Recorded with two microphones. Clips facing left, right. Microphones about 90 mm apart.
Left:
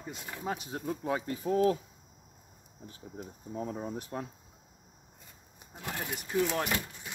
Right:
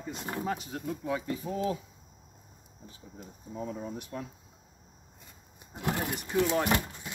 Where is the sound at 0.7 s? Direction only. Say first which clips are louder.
Even; 30° left (ahead or behind).